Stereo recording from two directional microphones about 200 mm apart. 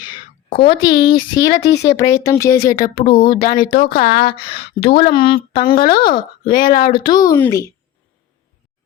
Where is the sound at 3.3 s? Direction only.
45° left (ahead or behind).